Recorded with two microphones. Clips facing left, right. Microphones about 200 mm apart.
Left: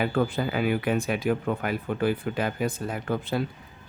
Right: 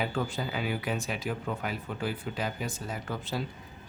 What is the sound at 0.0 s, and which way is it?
Speech, 55° left (ahead or behind).